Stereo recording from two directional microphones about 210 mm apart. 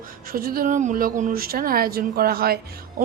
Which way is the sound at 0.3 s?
45° right (ahead or behind).